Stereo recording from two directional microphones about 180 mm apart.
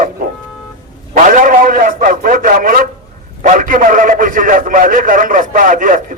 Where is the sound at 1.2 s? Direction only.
45° right (ahead or behind).